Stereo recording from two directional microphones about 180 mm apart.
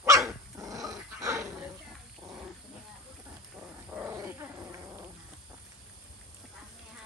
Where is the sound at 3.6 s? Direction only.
10° right (ahead or behind).